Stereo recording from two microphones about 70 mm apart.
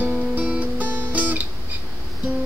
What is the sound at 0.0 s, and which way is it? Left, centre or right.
Guitar, right.